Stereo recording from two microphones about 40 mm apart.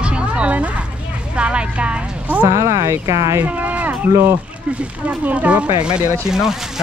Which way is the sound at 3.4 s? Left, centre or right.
Right.